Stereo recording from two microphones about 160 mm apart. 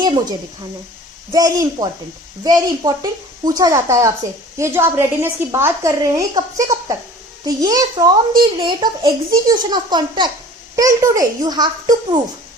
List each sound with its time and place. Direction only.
1.3 s a child's voice: 20° right (ahead or behind)